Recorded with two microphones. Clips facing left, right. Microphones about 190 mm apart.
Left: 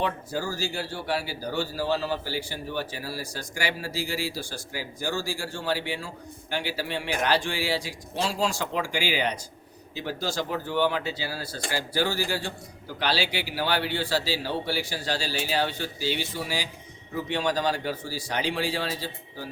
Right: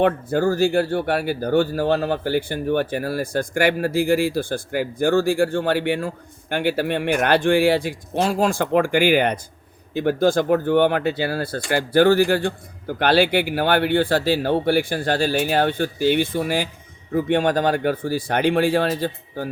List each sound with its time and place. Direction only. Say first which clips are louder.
0.0 s speech: right 11 dB; 55° right (ahead or behind)